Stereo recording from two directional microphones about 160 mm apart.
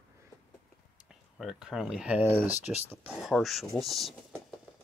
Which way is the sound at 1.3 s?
Centre (ahead or behind).